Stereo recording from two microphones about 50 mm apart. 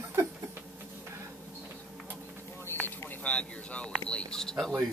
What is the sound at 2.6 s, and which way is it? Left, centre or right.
Vehicle, left.